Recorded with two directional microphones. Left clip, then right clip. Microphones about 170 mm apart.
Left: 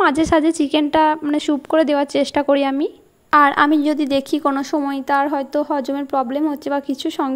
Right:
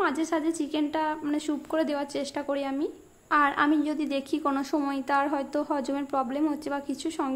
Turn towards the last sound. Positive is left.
turn(degrees=35)  # may be behind; listen again after turning